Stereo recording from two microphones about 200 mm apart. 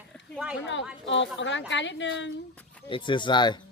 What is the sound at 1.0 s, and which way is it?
A woman's voice, 65° left (ahead or behind).